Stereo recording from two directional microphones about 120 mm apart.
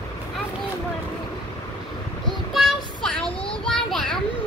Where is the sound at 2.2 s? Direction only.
Centre (ahead or behind).